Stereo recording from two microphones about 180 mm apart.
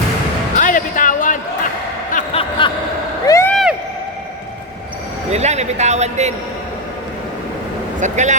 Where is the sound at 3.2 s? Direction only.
15° left (ahead or behind).